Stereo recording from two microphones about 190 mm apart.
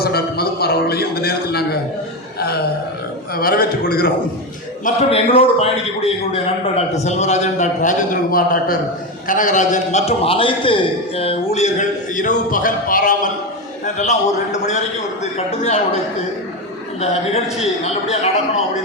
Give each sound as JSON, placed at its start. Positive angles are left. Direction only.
{"t": 0.0, "sound": "a sound", "side_deg": 55}
{"t": 3.3, "sound": "a man's voice", "side_deg": 50}
{"t": 4.9, "sound": "a man's voice", "side_deg": 35}
{"t": 17.0, "sound": "a man's voice", "side_deg": 35}